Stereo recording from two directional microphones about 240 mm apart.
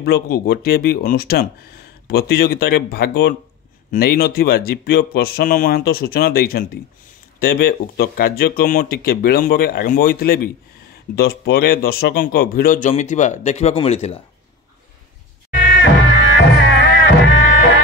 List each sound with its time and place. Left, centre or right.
0.0 s speech: left
15.8 s music: left